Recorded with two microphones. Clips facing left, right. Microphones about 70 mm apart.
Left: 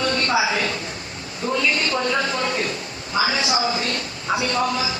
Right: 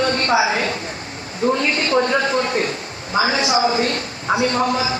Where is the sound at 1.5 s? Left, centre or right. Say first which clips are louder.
Right 1 dB; right.